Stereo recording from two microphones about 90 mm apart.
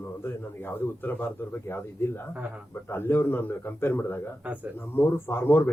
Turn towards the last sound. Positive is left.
turn(degrees=25)  # may be behind; listen again after turning